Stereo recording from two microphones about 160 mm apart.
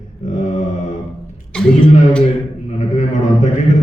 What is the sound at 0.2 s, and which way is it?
Mantra, 50° left (ahead or behind).